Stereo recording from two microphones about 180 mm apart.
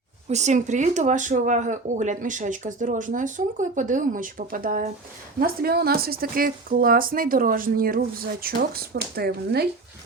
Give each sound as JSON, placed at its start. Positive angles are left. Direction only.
{"t": 0.3, "sound": "speech", "side_deg": -40}